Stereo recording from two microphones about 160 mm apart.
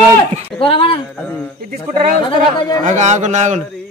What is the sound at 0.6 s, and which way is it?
Speech, 35° left (ahead or behind).